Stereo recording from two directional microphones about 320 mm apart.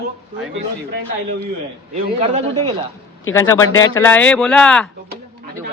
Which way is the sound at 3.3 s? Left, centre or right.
Centre.